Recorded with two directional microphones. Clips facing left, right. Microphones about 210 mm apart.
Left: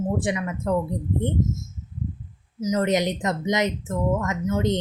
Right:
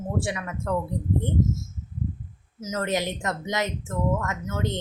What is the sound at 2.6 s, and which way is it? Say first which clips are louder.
Speech: left 5 dB; 15° left (ahead or behind).